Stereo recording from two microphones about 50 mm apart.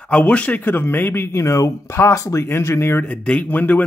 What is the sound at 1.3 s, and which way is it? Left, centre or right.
Speech, left.